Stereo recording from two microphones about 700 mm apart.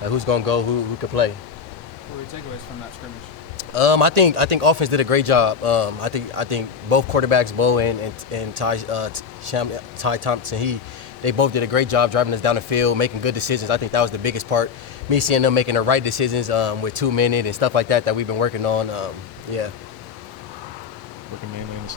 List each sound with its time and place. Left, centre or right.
0.0 s speech: right
3.6 s a man's voice: right